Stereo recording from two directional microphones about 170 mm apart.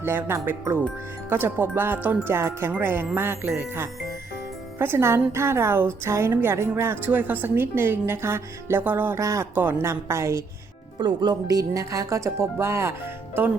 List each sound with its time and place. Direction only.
0.0 s a woman's voice: 15° right (ahead or behind)
4.8 s a woman's voice: 15° right (ahead or behind)